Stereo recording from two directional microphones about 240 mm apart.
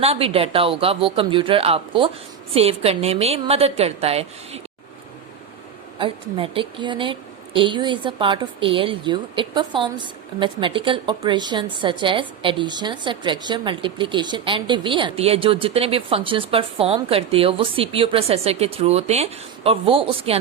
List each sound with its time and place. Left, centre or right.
0.0 s a woman's voice: right
6.0 s a woman's voice: right